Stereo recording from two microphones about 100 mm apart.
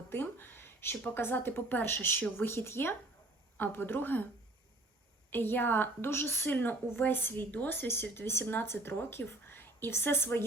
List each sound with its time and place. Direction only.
0.1 s a woman's voice: 20° left (ahead or behind)
5.3 s a woman's voice: 20° left (ahead or behind)